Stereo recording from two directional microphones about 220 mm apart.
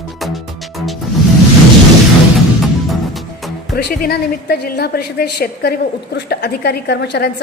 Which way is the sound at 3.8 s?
45° left (ahead or behind).